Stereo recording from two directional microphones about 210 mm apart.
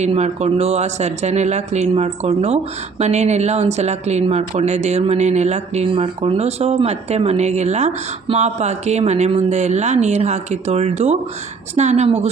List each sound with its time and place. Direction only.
0.0 s speech: 30° right (ahead or behind)